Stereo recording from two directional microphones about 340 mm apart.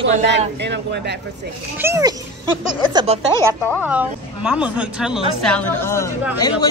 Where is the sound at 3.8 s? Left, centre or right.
Centre.